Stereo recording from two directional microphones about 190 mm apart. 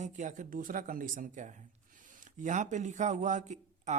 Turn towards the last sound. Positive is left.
turn(degrees=-40)  # may be behind; listen again after turning